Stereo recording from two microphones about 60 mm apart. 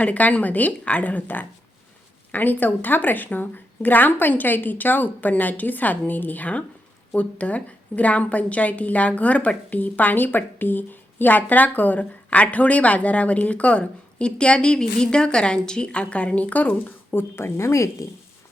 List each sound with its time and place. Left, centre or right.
0.0 s a woman's voice: left
17.3 s a woman's voice: left